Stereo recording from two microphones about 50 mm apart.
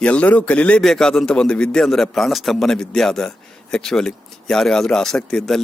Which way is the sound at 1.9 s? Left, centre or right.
Centre.